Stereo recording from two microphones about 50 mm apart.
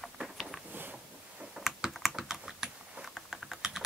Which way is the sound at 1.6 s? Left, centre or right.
Centre.